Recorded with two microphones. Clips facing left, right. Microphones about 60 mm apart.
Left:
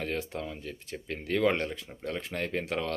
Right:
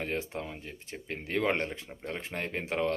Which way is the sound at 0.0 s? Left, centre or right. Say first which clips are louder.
Left 1 dB; right.